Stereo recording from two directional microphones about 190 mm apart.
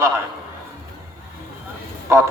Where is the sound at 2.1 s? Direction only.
15° right (ahead or behind).